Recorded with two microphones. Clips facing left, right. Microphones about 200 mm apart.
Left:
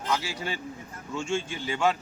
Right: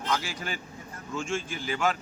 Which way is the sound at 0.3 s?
25° left (ahead or behind).